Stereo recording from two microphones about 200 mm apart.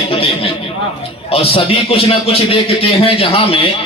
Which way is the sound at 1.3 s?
30° left (ahead or behind).